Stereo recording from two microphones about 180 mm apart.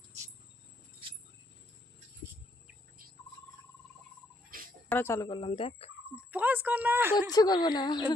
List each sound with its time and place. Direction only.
4.9 s speech: 15° left (ahead or behind); by 5.9 s 30° left (ahead or behind)
6.3 s a woman's voice: 10° right (ahead or behind)
7.3 s speech: 20° left (ahead or behind)